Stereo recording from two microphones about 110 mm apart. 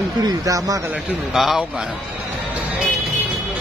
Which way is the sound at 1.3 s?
Centre (ahead or behind).